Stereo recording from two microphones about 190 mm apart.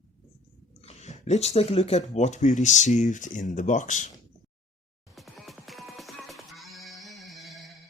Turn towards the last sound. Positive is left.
turn(degrees=0)  # may be behind; listen again after turning